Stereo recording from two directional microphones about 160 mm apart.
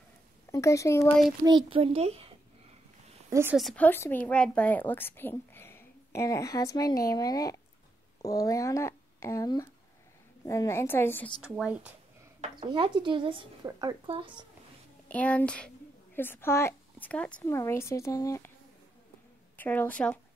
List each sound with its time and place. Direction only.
0.5 s speech: 20° left (ahead or behind)
1.4 s a child's voice: 25° right (ahead or behind)
3.3 s a woman's voice: 15° right (ahead or behind)
3.5 s a woman's voice: 5° left (ahead or behind)
11.4 s speech: 5° right (ahead or behind)
12.5 s a child's voice: 30° right (ahead or behind)
15.0 s a woman's voice: 10° left (ahead or behind)
19.5 s a woman's voice: 10° left (ahead or behind)